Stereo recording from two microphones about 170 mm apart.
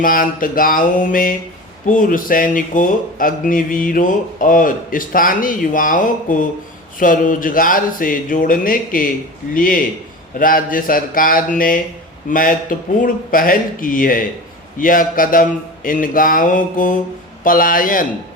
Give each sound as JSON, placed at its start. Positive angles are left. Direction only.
{"t": 0.0, "sound": "speech", "side_deg": 55}